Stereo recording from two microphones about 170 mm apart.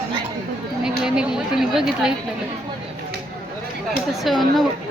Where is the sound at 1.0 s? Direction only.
5° right (ahead or behind).